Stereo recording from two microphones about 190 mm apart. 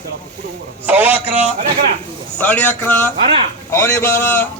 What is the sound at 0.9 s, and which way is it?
Speech, 10° right (ahead or behind).